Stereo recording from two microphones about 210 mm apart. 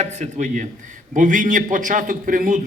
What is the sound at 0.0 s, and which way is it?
A man's voice, 35° right (ahead or behind).